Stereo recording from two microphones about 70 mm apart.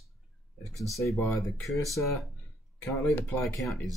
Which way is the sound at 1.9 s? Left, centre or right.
Centre.